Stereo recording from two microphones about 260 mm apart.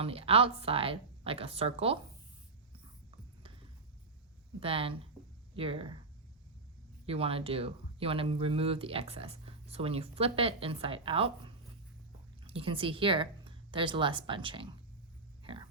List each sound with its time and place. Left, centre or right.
0.0 s speech: right
4.6 s speech: right
7.0 s speech: right